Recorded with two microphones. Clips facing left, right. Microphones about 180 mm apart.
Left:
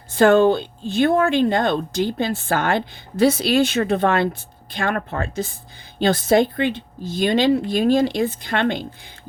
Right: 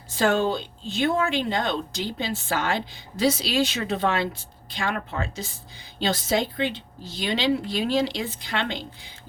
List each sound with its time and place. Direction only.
0.1 s speech: 55° left (ahead or behind)